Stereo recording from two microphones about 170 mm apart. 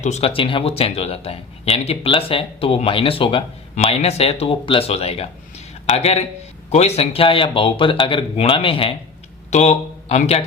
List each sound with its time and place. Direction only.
0.0 s speech: 40° left (ahead or behind)